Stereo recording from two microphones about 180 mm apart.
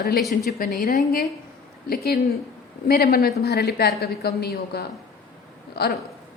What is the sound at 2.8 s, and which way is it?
A woman's voice, 60° left (ahead or behind).